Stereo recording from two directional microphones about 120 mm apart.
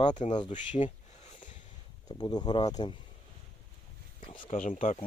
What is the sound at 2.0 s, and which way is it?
Speech, 35° left (ahead or behind).